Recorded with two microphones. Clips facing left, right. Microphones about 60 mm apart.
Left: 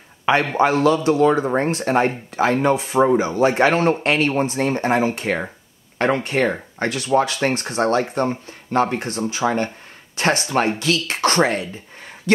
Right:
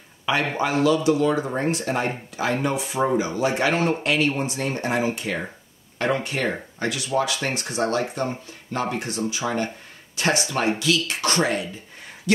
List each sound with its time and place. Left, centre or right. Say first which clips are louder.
0.2 s a sound: left 5 dB; left
0.8 s speech: even; left
3.3 s speech: left 5 dB; left